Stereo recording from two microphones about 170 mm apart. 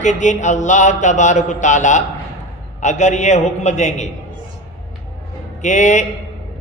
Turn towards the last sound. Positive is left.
turn(degrees=45)  # may be behind; listen again after turning